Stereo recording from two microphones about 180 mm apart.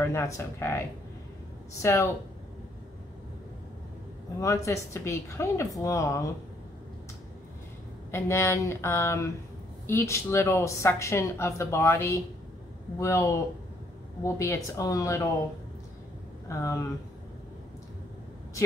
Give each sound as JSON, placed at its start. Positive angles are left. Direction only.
{"t": 0.0, "sound": "speech", "side_deg": 15}
{"t": 4.4, "sound": "speech", "side_deg": 15}
{"t": 8.1, "sound": "speech", "side_deg": 15}
{"t": 16.4, "sound": "speech", "side_deg": 15}